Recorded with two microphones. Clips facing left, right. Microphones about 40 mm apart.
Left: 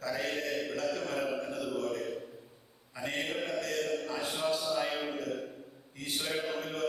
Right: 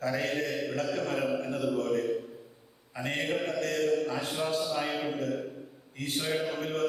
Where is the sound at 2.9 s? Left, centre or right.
Right.